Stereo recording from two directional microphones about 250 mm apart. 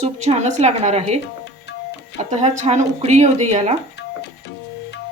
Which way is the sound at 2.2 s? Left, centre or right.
Right.